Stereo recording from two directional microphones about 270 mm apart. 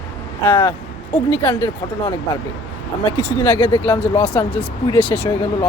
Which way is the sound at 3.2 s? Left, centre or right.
Centre.